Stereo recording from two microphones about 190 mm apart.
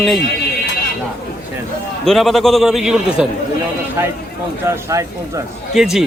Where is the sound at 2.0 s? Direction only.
Centre (ahead or behind).